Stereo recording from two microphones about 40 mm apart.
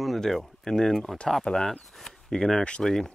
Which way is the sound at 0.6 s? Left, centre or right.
Centre.